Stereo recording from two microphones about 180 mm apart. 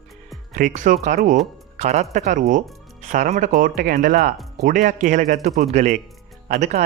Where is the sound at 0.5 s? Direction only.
45° right (ahead or behind).